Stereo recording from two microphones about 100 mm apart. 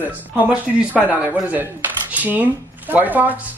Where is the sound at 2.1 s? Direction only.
15° right (ahead or behind).